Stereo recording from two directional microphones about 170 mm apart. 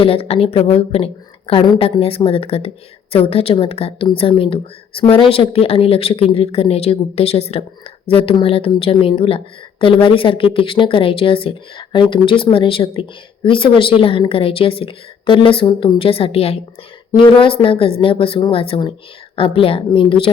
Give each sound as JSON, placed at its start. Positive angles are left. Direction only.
{"t": 0.0, "sound": "speech", "side_deg": 35}